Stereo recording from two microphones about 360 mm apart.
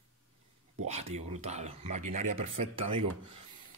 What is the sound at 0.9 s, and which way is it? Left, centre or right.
Speech, centre.